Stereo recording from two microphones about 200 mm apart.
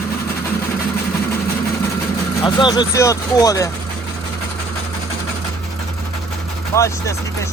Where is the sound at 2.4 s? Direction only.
20° left (ahead or behind).